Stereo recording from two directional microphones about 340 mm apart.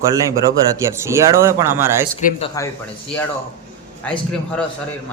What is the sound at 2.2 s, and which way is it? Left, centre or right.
Speech, left.